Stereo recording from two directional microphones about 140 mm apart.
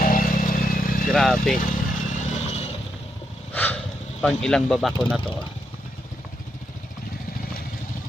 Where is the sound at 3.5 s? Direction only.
10° left (ahead or behind).